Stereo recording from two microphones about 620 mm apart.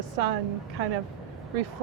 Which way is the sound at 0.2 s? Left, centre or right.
Right.